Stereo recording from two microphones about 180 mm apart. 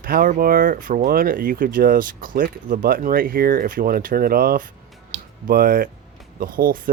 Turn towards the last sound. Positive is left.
turn(degrees=-50)  # may be behind; listen again after turning